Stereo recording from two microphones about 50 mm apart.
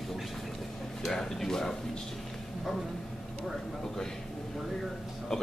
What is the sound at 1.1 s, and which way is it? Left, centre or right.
Speech, centre.